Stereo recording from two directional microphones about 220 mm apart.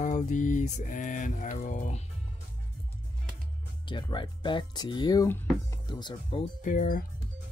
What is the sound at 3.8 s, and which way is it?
Speech, 20° left (ahead or behind).